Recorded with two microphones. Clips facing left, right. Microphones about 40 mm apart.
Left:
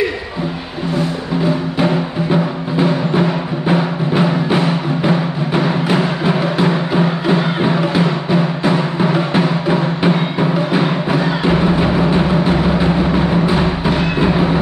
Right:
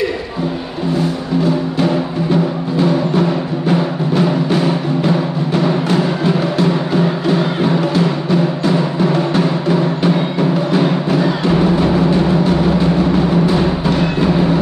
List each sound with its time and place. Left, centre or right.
2.3 s music: centre